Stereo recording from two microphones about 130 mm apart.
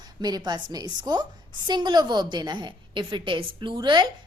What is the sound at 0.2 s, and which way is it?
A woman's voice, 30° right (ahead or behind).